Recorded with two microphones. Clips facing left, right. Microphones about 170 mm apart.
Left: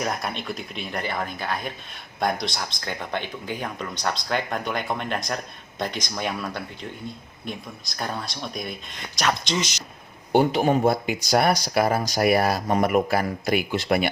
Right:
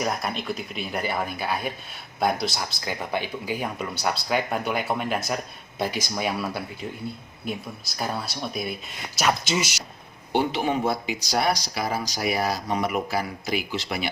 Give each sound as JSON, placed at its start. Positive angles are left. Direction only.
{"t": 0.0, "sound": "speech", "side_deg": 0}
{"t": 10.3, "sound": "speech", "side_deg": 45}